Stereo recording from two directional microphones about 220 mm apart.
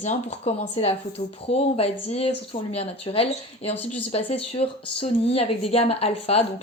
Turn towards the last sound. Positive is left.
turn(degrees=25)  # may be behind; listen again after turning